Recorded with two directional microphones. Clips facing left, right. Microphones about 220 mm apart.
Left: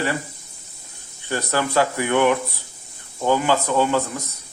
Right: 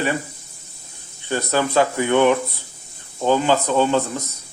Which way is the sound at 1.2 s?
20° right (ahead or behind).